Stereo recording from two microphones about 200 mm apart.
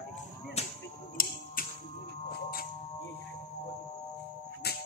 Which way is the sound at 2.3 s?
45° left (ahead or behind).